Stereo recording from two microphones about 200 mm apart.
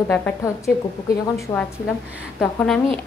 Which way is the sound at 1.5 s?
20° left (ahead or behind).